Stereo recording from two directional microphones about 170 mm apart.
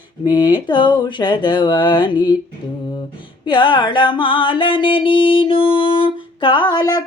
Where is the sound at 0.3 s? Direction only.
25° left (ahead or behind).